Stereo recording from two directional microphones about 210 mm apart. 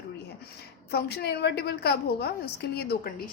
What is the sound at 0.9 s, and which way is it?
A woman's voice, 50° left (ahead or behind).